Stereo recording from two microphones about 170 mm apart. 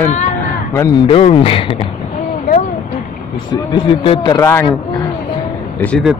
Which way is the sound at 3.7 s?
30° left (ahead or behind).